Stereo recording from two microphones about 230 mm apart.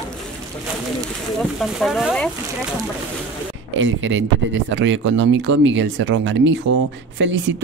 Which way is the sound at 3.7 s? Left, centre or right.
Right.